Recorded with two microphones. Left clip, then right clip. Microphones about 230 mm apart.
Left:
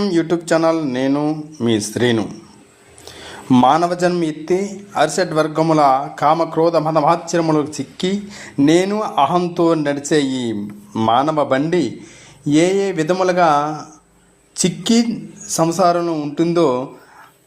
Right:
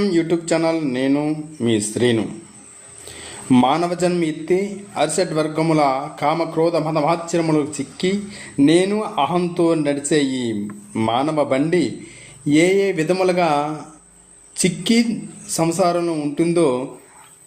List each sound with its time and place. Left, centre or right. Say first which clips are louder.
0.0 s speech: left 1 dB; centre
3.5 s speech: left 4 dB; centre